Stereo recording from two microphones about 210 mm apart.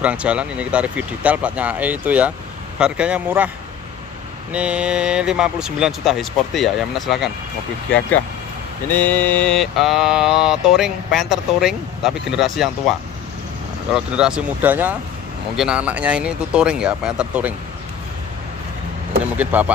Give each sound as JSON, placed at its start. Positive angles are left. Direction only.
{"t": 0.0, "sound": "speech", "side_deg": -5}
{"t": 4.5, "sound": "mantra", "side_deg": -5}
{"t": 8.9, "sound": "mantra", "side_deg": 10}
{"t": 13.9, "sound": "mantra", "side_deg": -5}
{"t": 19.3, "sound": "speech", "side_deg": -5}